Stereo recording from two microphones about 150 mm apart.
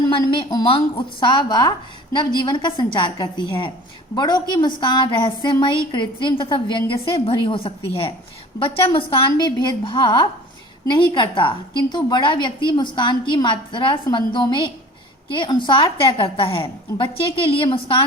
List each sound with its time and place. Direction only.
0.1 s a woman's voice: 35° left (ahead or behind)